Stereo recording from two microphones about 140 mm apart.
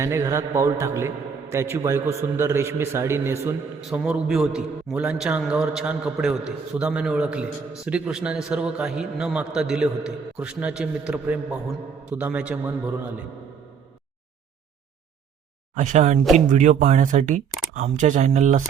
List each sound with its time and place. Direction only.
0.0 s a man's voice: 20° right (ahead or behind)
3.8 s a man's voice: 5° right (ahead or behind)
15.7 s speech: 60° right (ahead or behind)